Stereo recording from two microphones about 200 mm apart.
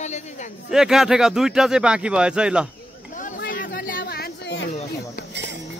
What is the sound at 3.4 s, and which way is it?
Chatter, 45° left (ahead or behind).